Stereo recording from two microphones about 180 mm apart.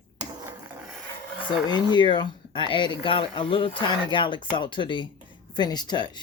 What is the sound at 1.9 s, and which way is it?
Speech, 25° left (ahead or behind).